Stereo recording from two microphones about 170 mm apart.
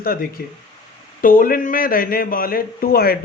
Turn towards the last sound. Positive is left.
turn(degrees=60)  # may be behind; listen again after turning